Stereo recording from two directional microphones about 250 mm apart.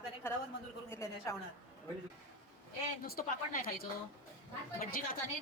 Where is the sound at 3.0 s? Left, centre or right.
Left.